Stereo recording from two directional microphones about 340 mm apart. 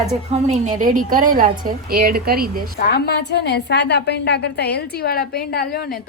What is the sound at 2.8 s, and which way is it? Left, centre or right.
A woman's voice, left.